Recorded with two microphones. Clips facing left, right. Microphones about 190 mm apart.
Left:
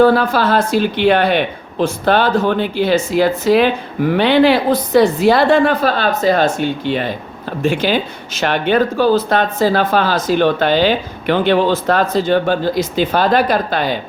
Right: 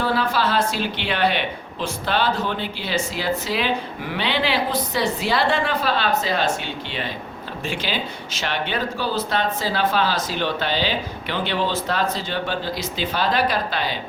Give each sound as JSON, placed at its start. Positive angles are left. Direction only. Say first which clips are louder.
{"t": 0.0, "sound": "speech", "louder": "left 10 dB", "side_deg": 50}